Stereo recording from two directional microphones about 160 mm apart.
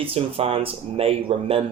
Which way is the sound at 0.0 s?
35° right (ahead or behind).